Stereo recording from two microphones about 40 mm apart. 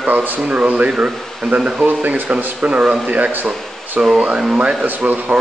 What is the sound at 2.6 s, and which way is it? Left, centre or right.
Speech, right.